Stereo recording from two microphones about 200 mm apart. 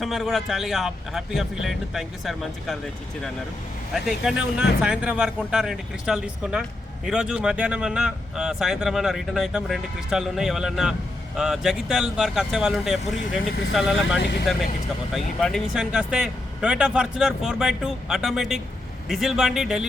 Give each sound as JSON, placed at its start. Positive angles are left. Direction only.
{"t": 0.0, "sound": "speech", "side_deg": 0}
{"t": 14.2, "sound": "speech", "side_deg": 60}
{"t": 15.1, "sound": "speech", "side_deg": 0}